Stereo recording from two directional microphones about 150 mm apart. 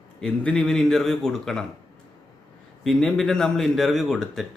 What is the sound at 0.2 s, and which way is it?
A man's voice, 5° left (ahead or behind).